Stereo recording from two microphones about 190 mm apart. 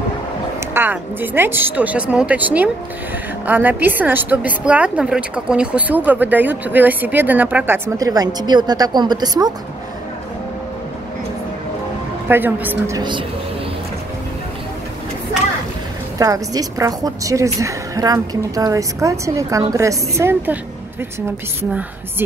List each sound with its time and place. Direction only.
0.6 s a woman's voice: 10° right (ahead or behind)
12.3 s a woman's voice: 10° right (ahead or behind)
16.2 s a woman's voice: 15° right (ahead or behind)